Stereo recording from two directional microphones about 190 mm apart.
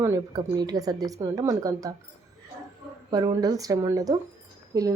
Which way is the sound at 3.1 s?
20° right (ahead or behind).